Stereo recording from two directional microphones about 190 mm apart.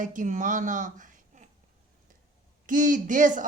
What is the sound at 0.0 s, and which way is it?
Speech, 40° right (ahead or behind).